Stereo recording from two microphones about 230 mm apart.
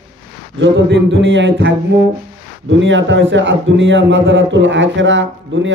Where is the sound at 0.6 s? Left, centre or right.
Right.